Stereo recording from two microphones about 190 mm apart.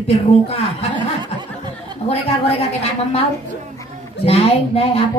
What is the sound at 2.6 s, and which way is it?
Speech, 30° left (ahead or behind).